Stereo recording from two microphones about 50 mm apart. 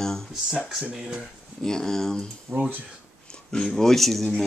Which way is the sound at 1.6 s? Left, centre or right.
Centre.